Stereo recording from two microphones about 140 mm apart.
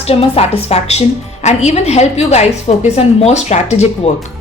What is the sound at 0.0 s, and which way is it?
A woman's voice, 45° left (ahead or behind).